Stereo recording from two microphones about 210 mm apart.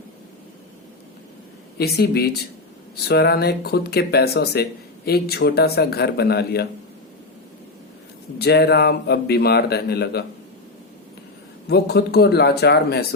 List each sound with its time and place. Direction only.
1.8 s a man's voice: 50° left (ahead or behind)
8.4 s a man's voice: 50° left (ahead or behind)
11.7 s a man's voice: 50° left (ahead or behind)